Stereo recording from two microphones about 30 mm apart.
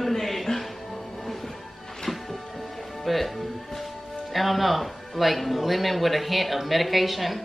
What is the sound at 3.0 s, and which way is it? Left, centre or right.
Speech, centre.